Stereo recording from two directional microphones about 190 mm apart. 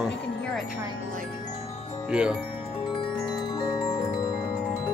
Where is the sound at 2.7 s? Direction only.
25° left (ahead or behind).